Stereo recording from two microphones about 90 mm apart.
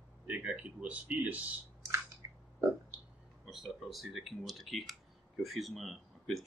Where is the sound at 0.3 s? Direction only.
15° right (ahead or behind).